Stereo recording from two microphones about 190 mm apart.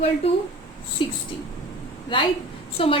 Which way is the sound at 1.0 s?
25° left (ahead or behind).